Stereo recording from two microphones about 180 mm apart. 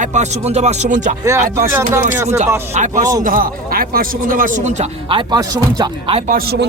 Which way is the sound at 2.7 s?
45° right (ahead or behind).